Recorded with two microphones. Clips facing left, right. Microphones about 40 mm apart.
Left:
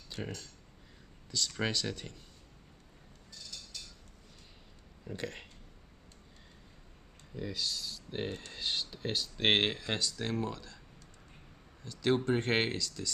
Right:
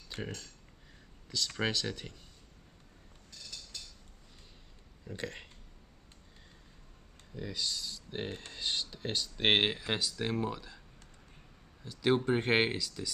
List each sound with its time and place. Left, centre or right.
0.1 s speech: right
1.6 s speech: centre
5.0 s speech: centre
7.3 s speech: centre
8.3 s speech: centre
8.5 s speech: centre
11.9 s speech: centre